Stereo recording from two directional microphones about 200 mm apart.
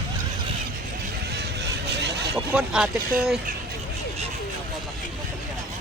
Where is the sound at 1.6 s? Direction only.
55° right (ahead or behind).